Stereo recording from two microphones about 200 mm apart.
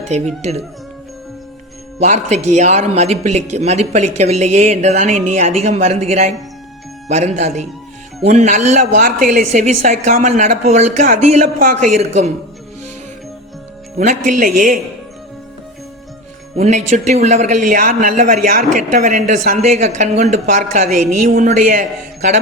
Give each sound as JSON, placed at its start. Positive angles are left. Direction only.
{"t": 2.0, "sound": "a man's voice", "side_deg": -35}
{"t": 14.0, "sound": "a man's voice", "side_deg": -40}
{"t": 16.6, "sound": "a man's voice", "side_deg": -35}